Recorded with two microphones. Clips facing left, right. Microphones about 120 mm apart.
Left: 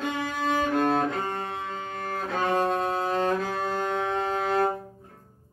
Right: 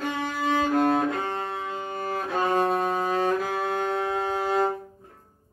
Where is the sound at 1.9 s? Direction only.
5° right (ahead or behind).